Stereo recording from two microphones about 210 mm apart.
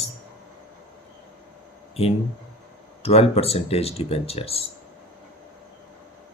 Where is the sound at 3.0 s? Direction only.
30° left (ahead or behind).